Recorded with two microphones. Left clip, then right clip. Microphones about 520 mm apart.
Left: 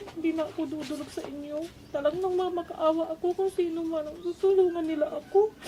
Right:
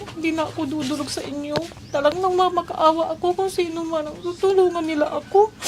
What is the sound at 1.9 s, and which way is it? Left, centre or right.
Speech, right.